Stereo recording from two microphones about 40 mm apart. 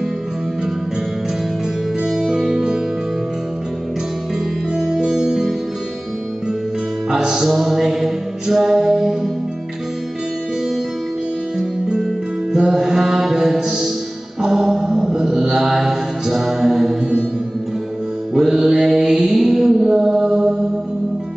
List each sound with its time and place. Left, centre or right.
2.0 s music: centre
4.7 s music: centre
7.1 s music: centre
11.5 s music: centre
14.4 s mantra: centre
17.0 s music: right
18.5 s mantra: centre